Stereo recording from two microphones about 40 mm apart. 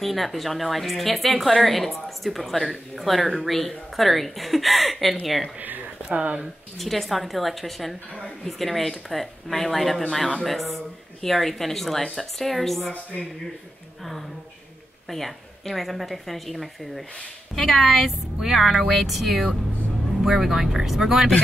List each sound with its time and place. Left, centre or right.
0.0 s speech: centre
6.0 s speech: right
6.8 s speech: centre
15.0 s speech: centre
18.4 s speech: centre